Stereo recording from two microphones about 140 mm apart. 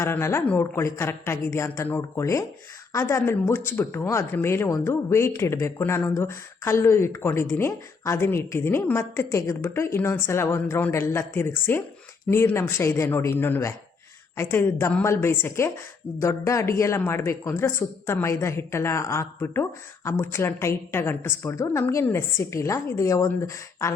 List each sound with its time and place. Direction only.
0.0 s speech: 20° left (ahead or behind)